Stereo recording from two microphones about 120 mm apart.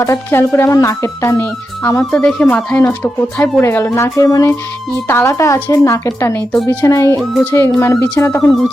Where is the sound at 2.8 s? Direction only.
20° left (ahead or behind).